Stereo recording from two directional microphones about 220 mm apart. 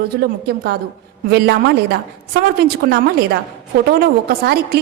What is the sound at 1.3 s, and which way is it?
Speech, 50° right (ahead or behind).